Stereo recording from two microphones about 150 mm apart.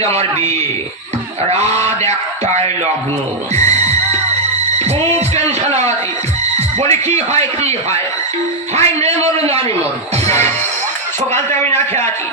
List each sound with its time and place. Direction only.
0.0 s speech: 45° right (ahead or behind)
11.7 s speech: 50° right (ahead or behind)